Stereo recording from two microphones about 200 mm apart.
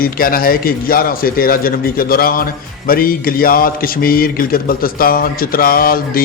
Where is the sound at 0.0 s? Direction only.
45° left (ahead or behind).